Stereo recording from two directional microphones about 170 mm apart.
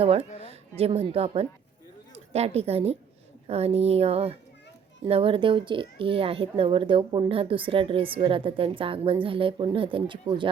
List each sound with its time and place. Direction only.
0.0 s speech: 35° right (ahead or behind)
0.3 s a sound: 40° left (ahead or behind)
0.8 s speech: 35° right (ahead or behind)